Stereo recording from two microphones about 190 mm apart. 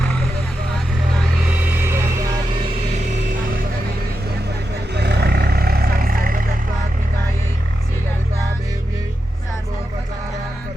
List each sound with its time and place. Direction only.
1.5 s vehicle: 10° right (ahead or behind)
4.9 s vehicle: 60° right (ahead or behind)